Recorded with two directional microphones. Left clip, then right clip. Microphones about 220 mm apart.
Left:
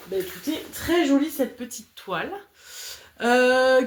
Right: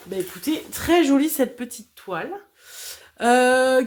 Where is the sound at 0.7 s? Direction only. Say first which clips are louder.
Right 3 dB; 50° right (ahead or behind).